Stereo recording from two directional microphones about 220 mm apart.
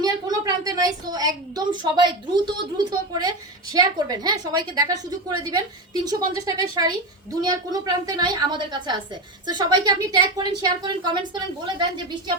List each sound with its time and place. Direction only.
0.0 s a woman's voice: 15° right (ahead or behind)